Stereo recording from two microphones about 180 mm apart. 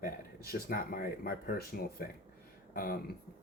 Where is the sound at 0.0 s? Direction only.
55° left (ahead or behind).